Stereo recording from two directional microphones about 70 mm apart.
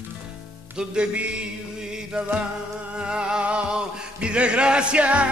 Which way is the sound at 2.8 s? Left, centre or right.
Centre.